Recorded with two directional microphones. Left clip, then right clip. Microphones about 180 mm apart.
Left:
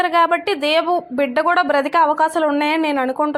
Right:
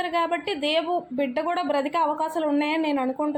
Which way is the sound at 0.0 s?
30° left (ahead or behind).